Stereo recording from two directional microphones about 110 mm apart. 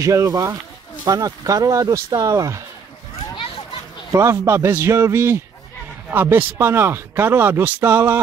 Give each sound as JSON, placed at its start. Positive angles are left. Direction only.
{"t": 0.0, "sound": "speech", "side_deg": -30}
{"t": 4.1, "sound": "speech", "side_deg": -25}